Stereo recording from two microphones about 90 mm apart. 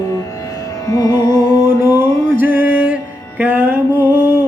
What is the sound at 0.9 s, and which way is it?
Carnatic music, 45° left (ahead or behind).